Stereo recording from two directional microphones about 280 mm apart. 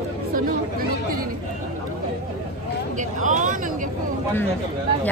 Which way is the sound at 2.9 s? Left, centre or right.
Right.